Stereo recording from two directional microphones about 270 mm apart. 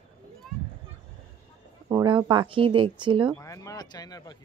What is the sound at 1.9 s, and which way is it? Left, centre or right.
Speech, centre.